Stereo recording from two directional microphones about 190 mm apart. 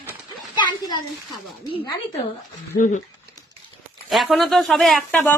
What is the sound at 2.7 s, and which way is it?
Speech, 45° left (ahead or behind).